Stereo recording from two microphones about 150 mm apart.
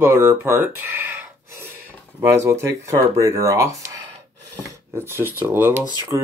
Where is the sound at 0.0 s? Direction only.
15° right (ahead or behind).